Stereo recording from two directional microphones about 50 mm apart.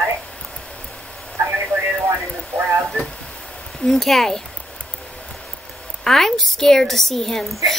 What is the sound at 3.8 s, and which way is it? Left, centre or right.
Speech, centre.